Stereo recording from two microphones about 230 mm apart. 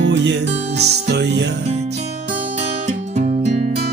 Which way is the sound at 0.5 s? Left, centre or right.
Right.